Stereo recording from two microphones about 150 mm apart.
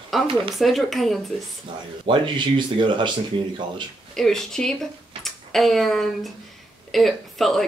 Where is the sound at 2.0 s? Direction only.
30° right (ahead or behind).